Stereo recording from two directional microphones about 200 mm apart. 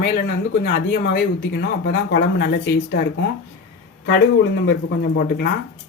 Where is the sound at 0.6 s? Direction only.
50° left (ahead or behind).